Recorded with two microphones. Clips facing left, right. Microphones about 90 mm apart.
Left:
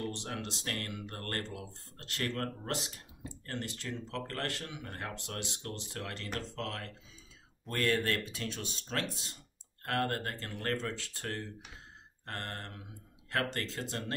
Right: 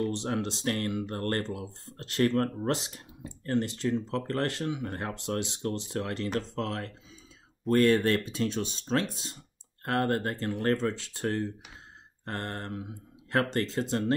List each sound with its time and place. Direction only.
0.1 s speech: 25° right (ahead or behind)